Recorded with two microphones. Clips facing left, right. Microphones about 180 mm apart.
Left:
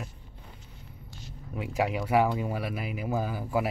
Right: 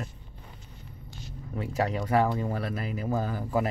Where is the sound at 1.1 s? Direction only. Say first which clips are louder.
Right 3 dB; 10° left (ahead or behind).